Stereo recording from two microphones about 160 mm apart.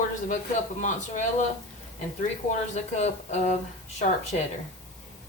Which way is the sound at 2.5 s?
50° left (ahead or behind).